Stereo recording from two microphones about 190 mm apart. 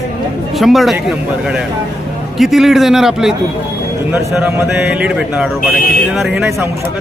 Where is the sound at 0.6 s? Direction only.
Centre (ahead or behind).